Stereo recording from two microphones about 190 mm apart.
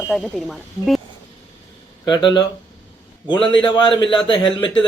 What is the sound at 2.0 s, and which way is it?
A man's voice, 20° left (ahead or behind).